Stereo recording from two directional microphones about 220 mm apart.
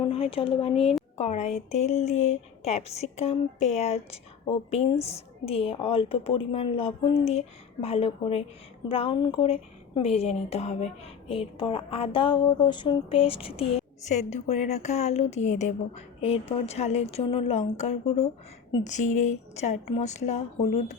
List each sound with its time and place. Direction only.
0.0 s a woman's voice: 25° left (ahead or behind)